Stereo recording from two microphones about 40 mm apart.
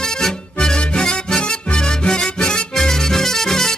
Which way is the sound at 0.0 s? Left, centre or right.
Centre.